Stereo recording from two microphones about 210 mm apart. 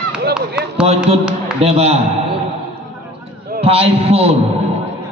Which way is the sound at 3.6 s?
30° right (ahead or behind).